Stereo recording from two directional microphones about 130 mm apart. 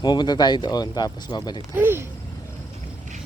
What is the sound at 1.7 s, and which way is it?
Speech, 15° right (ahead or behind).